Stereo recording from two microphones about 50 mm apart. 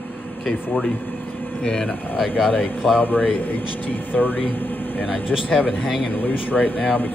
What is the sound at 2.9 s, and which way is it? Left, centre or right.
Speech, left.